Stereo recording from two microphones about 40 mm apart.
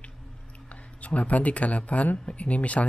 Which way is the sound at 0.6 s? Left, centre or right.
Left.